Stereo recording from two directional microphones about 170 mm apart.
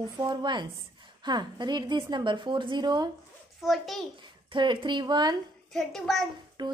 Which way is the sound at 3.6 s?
Centre (ahead or behind).